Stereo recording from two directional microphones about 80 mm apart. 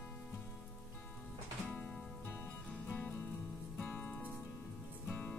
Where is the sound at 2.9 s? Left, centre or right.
Centre.